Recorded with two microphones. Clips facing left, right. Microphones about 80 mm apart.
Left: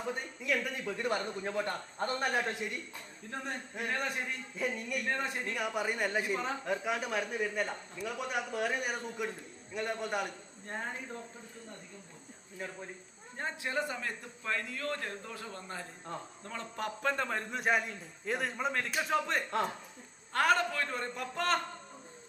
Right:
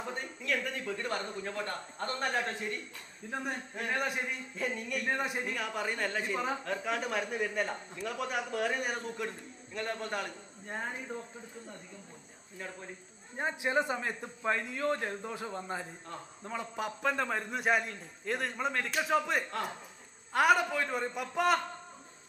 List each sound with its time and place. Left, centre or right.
0.1 s a man's voice: centre
3.2 s a man's voice: centre
5.1 s a man's voice: centre
5.5 s a man's voice: centre
6.3 s a man's voice: centre
10.7 s a man's voice: centre
13.3 s a man's voice: centre